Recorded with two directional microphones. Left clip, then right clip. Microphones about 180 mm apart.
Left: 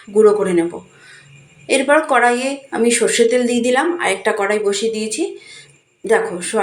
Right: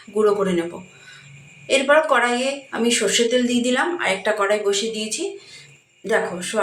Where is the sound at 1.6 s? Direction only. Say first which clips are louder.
Left 2 dB; 15° left (ahead or behind).